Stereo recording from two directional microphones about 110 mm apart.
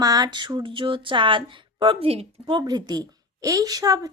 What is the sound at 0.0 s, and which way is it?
Speech, 35° right (ahead or behind).